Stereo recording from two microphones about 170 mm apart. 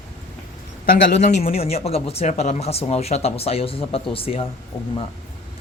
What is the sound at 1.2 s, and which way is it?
Speech, 40° left (ahead or behind).